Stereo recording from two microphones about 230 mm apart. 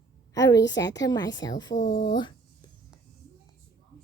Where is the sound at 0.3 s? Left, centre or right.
Centre.